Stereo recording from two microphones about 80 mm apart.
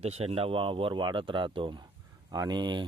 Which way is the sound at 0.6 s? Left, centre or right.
Right.